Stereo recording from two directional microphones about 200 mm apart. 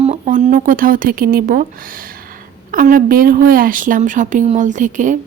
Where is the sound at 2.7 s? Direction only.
45° right (ahead or behind).